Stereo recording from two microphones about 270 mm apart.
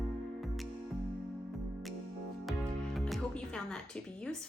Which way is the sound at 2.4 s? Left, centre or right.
Centre.